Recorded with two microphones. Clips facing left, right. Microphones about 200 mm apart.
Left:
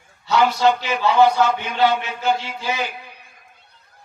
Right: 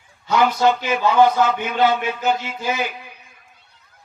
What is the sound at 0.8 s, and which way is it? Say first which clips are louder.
A man's voice: right 1 dB; 50° right (ahead or behind).